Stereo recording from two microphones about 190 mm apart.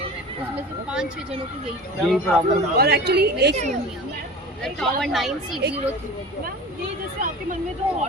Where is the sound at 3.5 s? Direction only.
40° right (ahead or behind).